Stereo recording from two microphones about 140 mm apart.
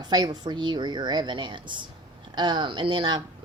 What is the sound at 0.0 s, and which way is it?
Speech, 30° right (ahead or behind).